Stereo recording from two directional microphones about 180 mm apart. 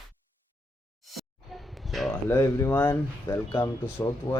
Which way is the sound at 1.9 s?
Centre (ahead or behind).